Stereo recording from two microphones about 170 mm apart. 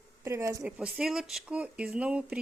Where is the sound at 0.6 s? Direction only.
5° right (ahead or behind).